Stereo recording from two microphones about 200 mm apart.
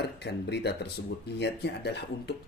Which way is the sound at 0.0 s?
55° left (ahead or behind).